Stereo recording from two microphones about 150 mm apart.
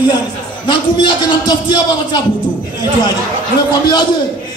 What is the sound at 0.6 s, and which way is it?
A man's voice, 30° left (ahead or behind).